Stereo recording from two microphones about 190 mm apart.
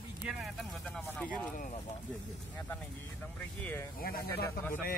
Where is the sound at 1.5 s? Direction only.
45° left (ahead or behind).